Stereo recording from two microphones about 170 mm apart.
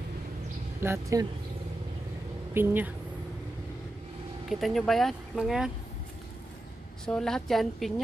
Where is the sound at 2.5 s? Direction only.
10° right (ahead or behind).